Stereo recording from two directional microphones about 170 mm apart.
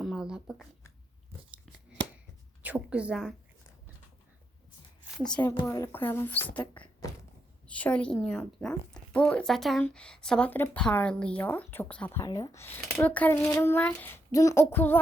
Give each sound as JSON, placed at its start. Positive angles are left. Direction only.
{"t": 0.0, "sound": "a sound", "side_deg": -5}
{"t": 2.6, "sound": "a woman's voice", "side_deg": -5}
{"t": 5.1, "sound": "a woman's voice", "side_deg": 5}
{"t": 5.5, "sound": "a woman's voice", "side_deg": 20}
{"t": 7.7, "sound": "a woman's voice", "side_deg": 10}
{"t": 12.2, "sound": "a woman's voice", "side_deg": 20}